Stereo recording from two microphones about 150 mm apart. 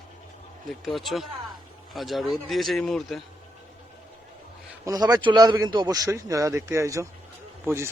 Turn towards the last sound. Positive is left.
turn(degrees=-15)  # may be behind; listen again after turning